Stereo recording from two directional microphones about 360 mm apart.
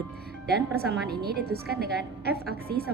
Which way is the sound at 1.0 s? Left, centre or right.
Right.